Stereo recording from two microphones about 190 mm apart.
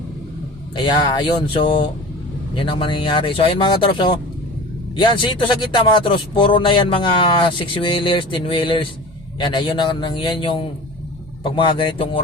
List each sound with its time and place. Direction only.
0.9 s a man's voice: 25° left (ahead or behind)